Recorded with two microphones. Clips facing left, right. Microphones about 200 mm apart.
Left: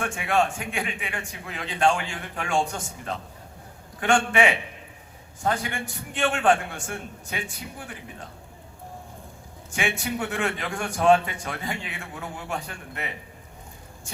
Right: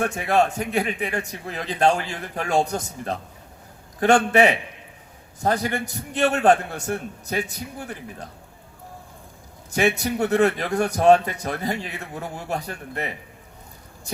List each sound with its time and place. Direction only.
0.0 s a man's voice: 35° right (ahead or behind)
4.3 s a man's voice: 40° right (ahead or behind)
9.7 s a man's voice: 40° right (ahead or behind)